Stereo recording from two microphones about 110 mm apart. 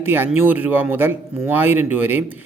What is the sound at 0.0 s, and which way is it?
A man's voice, 15° right (ahead or behind).